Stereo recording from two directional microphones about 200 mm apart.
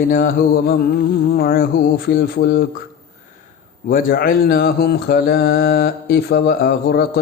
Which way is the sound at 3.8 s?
45° left (ahead or behind).